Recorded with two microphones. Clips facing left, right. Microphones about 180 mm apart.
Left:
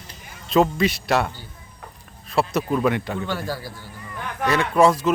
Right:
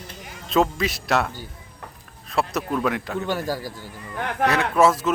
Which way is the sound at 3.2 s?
40° right (ahead or behind).